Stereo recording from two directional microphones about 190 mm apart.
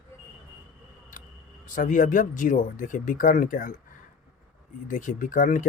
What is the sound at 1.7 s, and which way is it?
Speech, 45° left (ahead or behind).